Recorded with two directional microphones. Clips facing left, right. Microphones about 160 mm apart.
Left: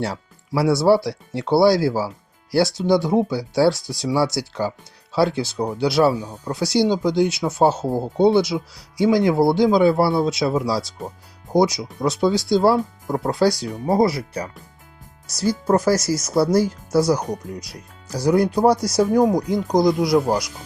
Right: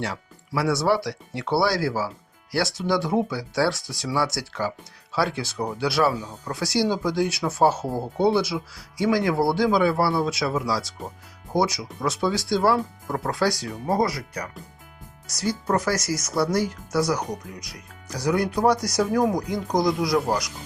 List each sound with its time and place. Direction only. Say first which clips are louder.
0.0 s speech: left 4 dB; 35° left (ahead or behind)
6.2 s speech: left 4 dB; 15° left (ahead or behind)
6.5 s speech: left 5 dB; 25° left (ahead or behind)